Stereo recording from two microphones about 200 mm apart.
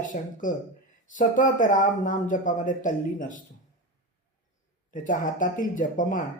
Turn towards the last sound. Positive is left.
turn(degrees=40)  # may be behind; listen again after turning